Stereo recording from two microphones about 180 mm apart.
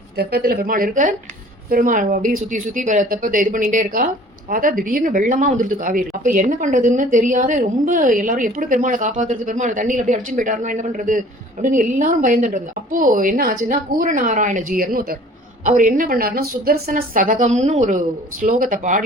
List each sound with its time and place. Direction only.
0.2 s speech: 65° right (ahead or behind); by 19.0 s 45° right (ahead or behind)